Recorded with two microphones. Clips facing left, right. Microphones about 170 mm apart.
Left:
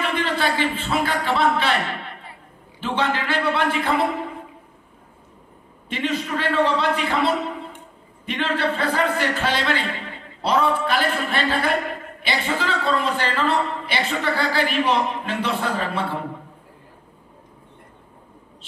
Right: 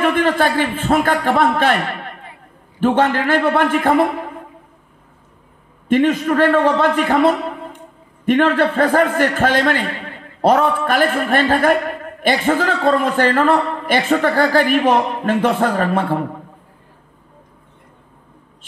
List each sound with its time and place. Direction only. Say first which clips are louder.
0.0 s a man's voice: right 7 dB; 50° right (ahead or behind)
5.9 s a man's voice: right 11 dB; 50° right (ahead or behind)